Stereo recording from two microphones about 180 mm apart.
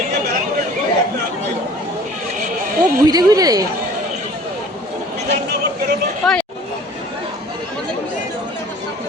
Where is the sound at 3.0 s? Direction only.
20° right (ahead or behind).